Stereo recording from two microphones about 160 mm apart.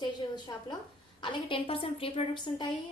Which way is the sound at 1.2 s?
35° left (ahead or behind).